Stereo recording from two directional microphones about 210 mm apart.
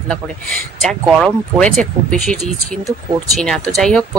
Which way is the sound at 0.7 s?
Centre (ahead or behind).